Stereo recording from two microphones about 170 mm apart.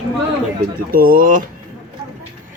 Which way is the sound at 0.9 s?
60° right (ahead or behind).